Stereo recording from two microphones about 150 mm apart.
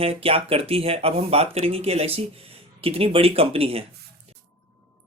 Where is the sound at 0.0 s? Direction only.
40° right (ahead or behind).